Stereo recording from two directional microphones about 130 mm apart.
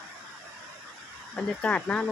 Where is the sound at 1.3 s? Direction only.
10° left (ahead or behind).